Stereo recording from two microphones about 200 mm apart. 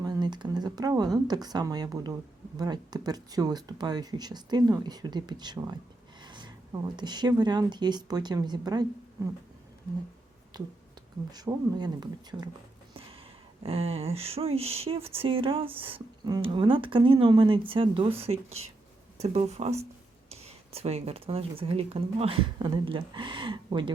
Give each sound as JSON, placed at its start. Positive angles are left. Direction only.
{"t": 0.0, "sound": "speech", "side_deg": -20}
{"t": 10.5, "sound": "speech", "side_deg": -20}
{"t": 13.6, "sound": "speech", "side_deg": -30}